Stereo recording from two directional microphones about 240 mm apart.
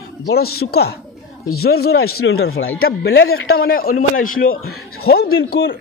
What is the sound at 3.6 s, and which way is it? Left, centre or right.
A man's voice, left.